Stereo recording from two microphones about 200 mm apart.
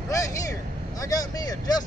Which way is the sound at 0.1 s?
15° left (ahead or behind).